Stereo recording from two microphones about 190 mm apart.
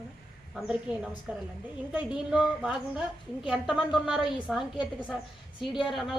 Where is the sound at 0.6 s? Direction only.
5° right (ahead or behind).